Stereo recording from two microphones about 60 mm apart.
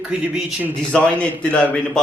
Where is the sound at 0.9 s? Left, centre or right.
Left.